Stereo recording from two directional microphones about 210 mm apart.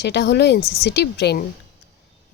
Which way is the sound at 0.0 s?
55° left (ahead or behind).